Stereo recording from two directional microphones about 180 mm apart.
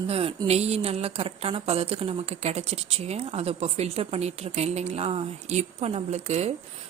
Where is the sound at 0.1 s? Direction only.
30° right (ahead or behind).